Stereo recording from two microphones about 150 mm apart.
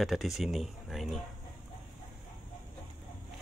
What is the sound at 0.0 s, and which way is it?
Speech, centre (ahead or behind).